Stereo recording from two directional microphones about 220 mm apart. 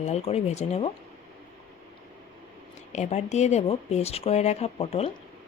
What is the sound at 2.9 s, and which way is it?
Speech, 30° left (ahead or behind).